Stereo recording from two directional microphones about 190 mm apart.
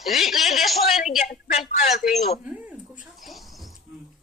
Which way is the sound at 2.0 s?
Centre (ahead or behind).